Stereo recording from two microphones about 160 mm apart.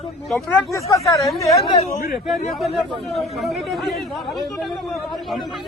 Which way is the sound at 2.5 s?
Centre (ahead or behind).